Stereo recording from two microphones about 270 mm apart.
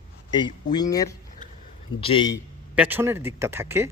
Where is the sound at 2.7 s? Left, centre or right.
Centre.